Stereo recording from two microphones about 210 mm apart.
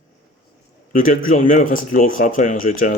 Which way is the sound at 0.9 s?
40° left (ahead or behind).